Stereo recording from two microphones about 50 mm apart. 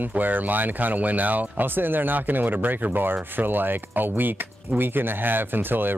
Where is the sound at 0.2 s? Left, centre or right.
Right.